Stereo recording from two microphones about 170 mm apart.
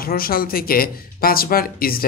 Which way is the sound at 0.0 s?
60° left (ahead or behind).